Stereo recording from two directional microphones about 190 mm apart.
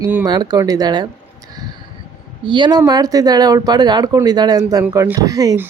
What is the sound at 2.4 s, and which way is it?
Speech, 25° right (ahead or behind).